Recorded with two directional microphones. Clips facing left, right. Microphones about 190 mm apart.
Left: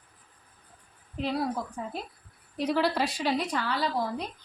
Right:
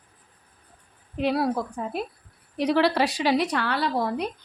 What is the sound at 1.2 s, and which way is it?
A woman's voice, 70° right (ahead or behind).